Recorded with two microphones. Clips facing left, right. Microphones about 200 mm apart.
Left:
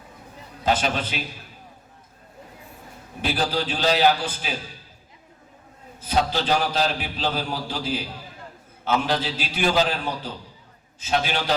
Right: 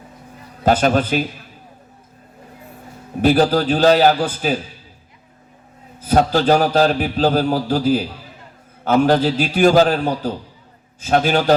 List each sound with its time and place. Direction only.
0.6 s a man's voice: 50° right (ahead or behind)
3.2 s a man's voice: 45° right (ahead or behind)
6.1 s a man's voice: 45° right (ahead or behind)